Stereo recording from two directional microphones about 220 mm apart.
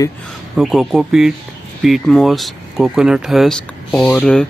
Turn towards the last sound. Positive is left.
turn(degrees=5)  # may be behind; listen again after turning